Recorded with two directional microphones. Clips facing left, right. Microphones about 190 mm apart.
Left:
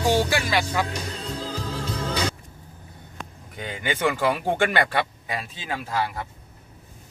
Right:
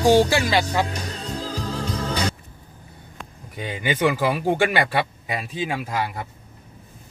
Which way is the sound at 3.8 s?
10° right (ahead or behind).